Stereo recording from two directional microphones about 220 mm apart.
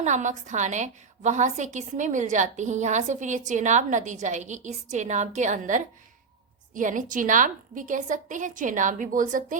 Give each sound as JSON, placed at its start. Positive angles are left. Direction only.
{"t": 0.0, "sound": "a woman's voice", "side_deg": -35}